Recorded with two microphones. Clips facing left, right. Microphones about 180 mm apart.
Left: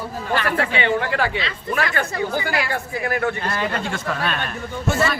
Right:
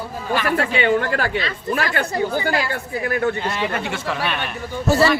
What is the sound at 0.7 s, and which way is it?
Speech, 45° right (ahead or behind).